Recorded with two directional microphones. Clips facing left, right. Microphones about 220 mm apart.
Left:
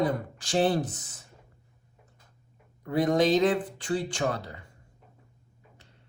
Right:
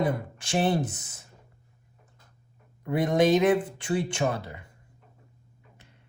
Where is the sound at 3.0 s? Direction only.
25° right (ahead or behind).